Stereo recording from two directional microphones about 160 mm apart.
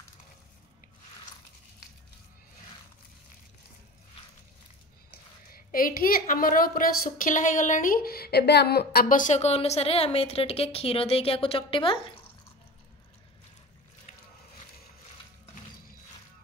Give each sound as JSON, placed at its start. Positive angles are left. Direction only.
{"t": 5.5, "sound": "a woman's voice", "side_deg": 60}